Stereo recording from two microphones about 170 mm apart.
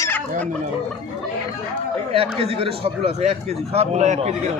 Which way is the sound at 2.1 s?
35° right (ahead or behind).